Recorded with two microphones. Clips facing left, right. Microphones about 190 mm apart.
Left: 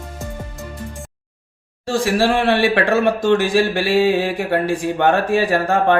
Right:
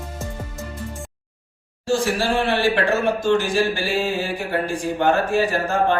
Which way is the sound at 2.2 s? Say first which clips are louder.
Left 4 dB; 60° left (ahead or behind).